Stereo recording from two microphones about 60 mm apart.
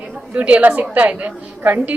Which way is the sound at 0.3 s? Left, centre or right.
Right.